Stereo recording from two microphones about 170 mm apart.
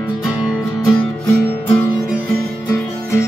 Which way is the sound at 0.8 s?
5° left (ahead or behind).